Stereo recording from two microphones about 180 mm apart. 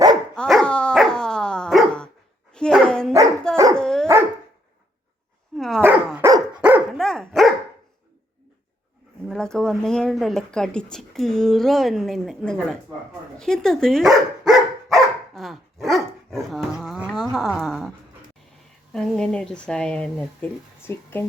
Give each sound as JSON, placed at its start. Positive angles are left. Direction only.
{"t": 0.3, "sound": "dog", "side_deg": 5}
{"t": 2.5, "sound": "speech", "side_deg": 5}
{"t": 3.5, "sound": "dog", "side_deg": -20}
{"t": 3.8, "sound": "dog", "side_deg": 5}
{"t": 5.5, "sound": "dog", "side_deg": 0}
{"t": 6.1, "sound": "dog", "side_deg": -15}
{"t": 6.6, "sound": "dog", "side_deg": -5}
{"t": 9.2, "sound": "speech", "side_deg": 5}
{"t": 13.4, "sound": "dog", "side_deg": 5}
{"t": 17.3, "sound": "speech", "side_deg": 0}
{"t": 18.9, "sound": "speech", "side_deg": 5}